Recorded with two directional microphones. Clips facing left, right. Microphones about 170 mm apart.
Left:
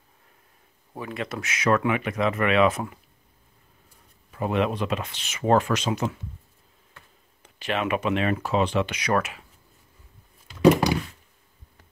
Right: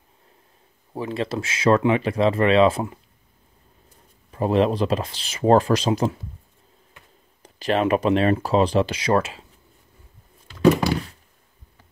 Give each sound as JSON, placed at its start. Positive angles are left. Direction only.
{"t": 0.9, "sound": "speech", "side_deg": -30}
{"t": 4.3, "sound": "speech", "side_deg": -35}
{"t": 7.4, "sound": "speech", "side_deg": -35}
{"t": 10.6, "sound": "thunk", "side_deg": 15}